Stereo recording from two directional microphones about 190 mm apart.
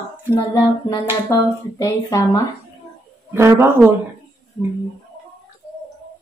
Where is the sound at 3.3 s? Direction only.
10° right (ahead or behind).